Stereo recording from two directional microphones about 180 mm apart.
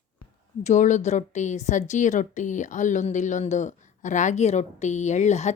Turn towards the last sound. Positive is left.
turn(degrees=40)  # may be behind; listen again after turning